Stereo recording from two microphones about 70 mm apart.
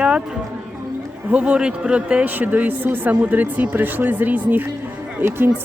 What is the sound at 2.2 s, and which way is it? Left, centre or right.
A man's voice, right.